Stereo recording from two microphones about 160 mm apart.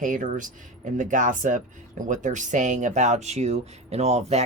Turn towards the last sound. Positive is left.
turn(degrees=-45)  # may be behind; listen again after turning